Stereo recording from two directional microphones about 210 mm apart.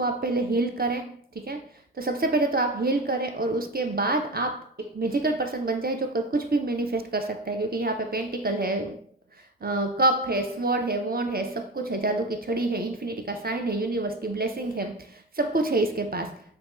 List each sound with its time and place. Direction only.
0.0 s a woman's voice: 45° right (ahead or behind)
2.0 s a woman's voice: 45° right (ahead or behind)